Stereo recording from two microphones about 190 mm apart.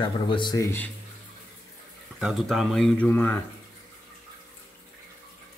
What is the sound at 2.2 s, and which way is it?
Speech, centre (ahead or behind).